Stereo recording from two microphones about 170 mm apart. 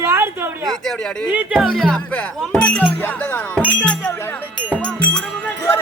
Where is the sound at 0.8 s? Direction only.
5° left (ahead or behind).